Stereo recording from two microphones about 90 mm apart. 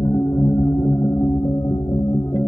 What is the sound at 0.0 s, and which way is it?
Music, 30° left (ahead or behind).